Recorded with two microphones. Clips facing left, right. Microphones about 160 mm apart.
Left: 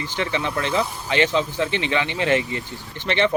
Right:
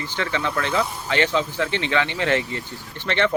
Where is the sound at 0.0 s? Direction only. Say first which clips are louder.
Left 1 dB; 20° left (ahead or behind).